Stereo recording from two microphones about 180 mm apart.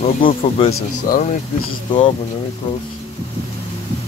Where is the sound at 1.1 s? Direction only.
55° left (ahead or behind).